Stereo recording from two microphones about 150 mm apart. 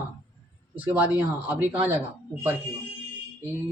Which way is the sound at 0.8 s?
10° right (ahead or behind).